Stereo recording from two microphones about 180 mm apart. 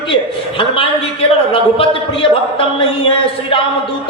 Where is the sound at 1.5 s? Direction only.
30° left (ahead or behind).